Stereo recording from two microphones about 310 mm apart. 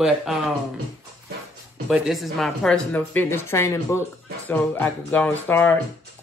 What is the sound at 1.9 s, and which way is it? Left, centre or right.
A woman's voice, centre.